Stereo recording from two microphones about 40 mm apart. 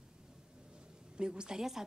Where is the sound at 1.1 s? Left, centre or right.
Right.